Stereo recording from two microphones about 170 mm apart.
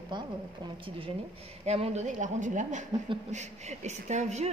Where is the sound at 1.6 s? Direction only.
40° right (ahead or behind).